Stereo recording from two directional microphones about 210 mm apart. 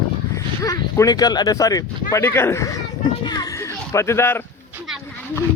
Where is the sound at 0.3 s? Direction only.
15° left (ahead or behind).